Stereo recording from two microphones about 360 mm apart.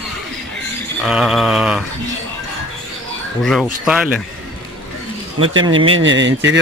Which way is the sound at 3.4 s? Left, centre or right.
Centre.